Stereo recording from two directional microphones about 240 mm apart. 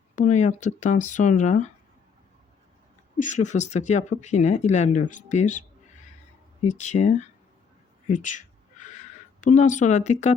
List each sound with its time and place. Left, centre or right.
0.2 s speech: left
3.2 s speech: left
8.0 s a sound: left